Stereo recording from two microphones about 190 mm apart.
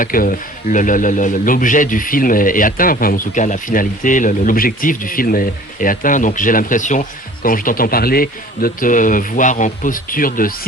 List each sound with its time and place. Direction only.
0.0 s speech: 45° left (ahead or behind)